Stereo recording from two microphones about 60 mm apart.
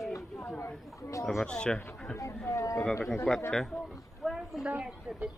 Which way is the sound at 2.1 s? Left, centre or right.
Left.